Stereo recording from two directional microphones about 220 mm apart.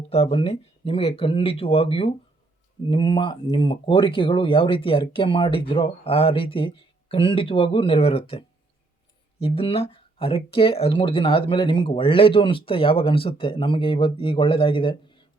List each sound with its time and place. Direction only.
0.1 s speech: 25° left (ahead or behind)